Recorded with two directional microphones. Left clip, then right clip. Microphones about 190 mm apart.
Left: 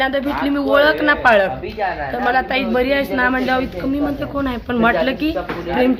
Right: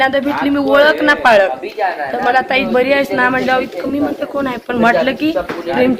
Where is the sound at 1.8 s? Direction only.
55° right (ahead or behind).